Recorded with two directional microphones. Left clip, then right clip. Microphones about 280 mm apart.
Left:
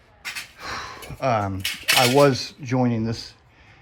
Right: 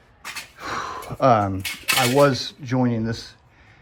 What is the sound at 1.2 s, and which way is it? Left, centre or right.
Cutlery, centre.